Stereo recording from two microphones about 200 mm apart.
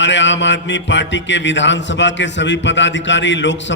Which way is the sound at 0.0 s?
65° left (ahead or behind).